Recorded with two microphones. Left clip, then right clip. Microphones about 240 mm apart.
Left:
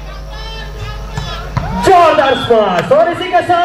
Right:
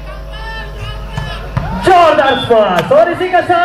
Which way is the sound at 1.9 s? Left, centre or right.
Left.